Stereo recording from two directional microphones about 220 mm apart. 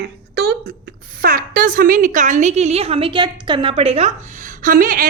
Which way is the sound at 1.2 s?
40° right (ahead or behind).